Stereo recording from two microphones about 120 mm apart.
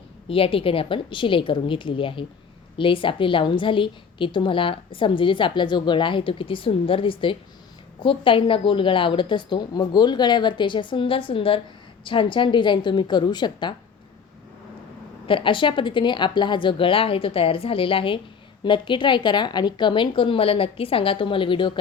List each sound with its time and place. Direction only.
0.3 s a woman's voice: 50° left (ahead or behind)
15.3 s a woman's voice: 45° left (ahead or behind)